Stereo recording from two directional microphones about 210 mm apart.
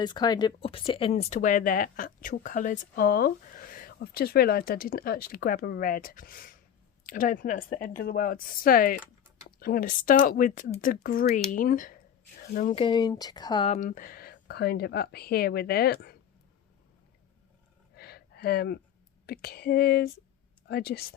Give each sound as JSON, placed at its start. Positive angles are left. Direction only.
{"t": 0.0, "sound": "speech", "side_deg": 20}
{"t": 12.6, "sound": "speech", "side_deg": 25}
{"t": 13.7, "sound": "speech", "side_deg": 40}
{"t": 17.9, "sound": "a sound", "side_deg": 50}
{"t": 19.2, "sound": "speech", "side_deg": 50}